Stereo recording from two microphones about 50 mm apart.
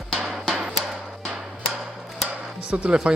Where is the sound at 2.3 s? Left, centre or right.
Right.